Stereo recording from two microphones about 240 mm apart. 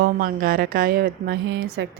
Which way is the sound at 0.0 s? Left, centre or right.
Right.